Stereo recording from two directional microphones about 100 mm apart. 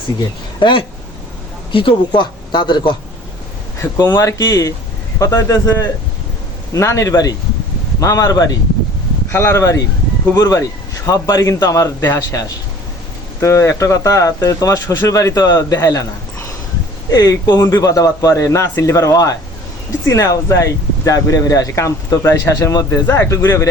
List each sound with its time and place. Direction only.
0.6 s speech: 60° left (ahead or behind)
3.8 s speech: 25° left (ahead or behind)
17.1 s speech: 40° left (ahead or behind)